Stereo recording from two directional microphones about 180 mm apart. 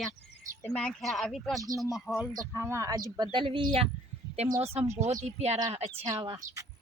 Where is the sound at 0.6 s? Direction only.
5° left (ahead or behind).